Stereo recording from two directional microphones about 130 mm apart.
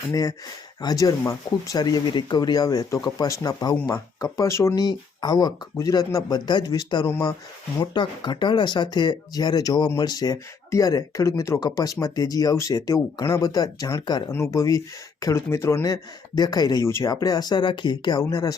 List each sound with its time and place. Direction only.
0.1 s speech: 30° left (ahead or behind)
14.3 s speech: 20° left (ahead or behind)